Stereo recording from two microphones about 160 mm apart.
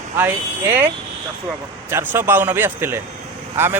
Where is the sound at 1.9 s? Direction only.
15° right (ahead or behind).